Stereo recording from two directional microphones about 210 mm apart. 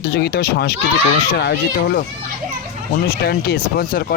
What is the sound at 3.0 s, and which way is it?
Speech, 50° left (ahead or behind).